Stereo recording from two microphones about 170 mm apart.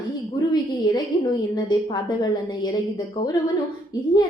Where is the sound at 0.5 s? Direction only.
25° left (ahead or behind).